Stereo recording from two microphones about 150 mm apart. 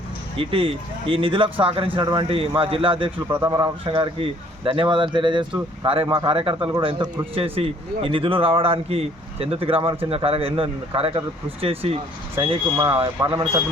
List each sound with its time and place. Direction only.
0.3 s speech: 35° right (ahead or behind)
13.1 s a man's voice: 20° right (ahead or behind)